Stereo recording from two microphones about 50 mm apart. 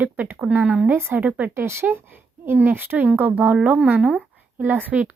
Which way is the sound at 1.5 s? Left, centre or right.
Right.